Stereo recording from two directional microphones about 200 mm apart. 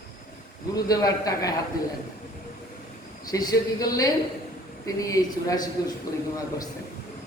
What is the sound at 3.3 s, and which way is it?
A man's voice, 20° left (ahead or behind).